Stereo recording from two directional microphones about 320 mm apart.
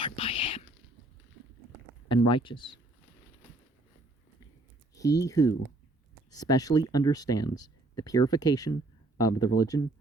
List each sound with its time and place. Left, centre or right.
0.0 s whispering: centre
2.0 s speech: centre
4.9 s speech: centre